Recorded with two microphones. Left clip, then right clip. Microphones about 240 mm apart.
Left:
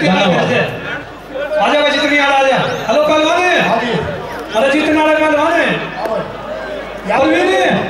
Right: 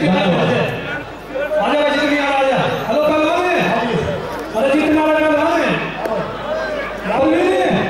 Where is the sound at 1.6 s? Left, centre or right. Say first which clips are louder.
Left 4 dB; centre.